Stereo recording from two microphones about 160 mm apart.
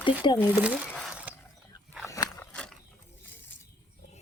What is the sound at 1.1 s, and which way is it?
Mechanisms, 10° right (ahead or behind).